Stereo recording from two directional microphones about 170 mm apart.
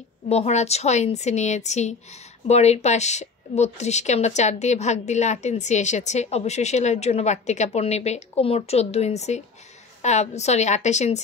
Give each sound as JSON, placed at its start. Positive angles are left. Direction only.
{"t": 0.3, "sound": "a woman's voice", "side_deg": 40}